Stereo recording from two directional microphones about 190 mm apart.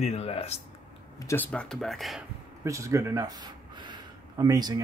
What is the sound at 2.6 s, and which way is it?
Speech, 15° right (ahead or behind).